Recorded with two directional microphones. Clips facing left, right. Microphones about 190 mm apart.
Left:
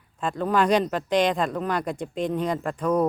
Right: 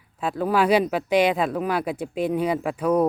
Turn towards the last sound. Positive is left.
turn(degrees=-10)  # may be behind; listen again after turning